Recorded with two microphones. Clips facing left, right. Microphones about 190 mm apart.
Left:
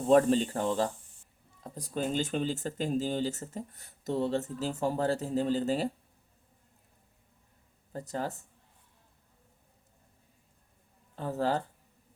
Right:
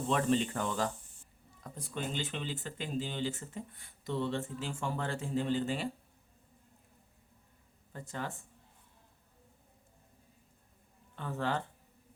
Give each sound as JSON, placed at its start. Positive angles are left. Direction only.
{"t": 0.1, "sound": "speech", "side_deg": 40}
{"t": 7.9, "sound": "speech", "side_deg": 40}
{"t": 11.1, "sound": "speech", "side_deg": 35}